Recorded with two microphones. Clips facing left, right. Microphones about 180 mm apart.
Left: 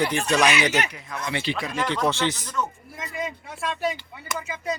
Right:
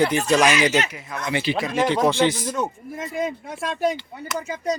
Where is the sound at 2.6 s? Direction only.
50° right (ahead or behind).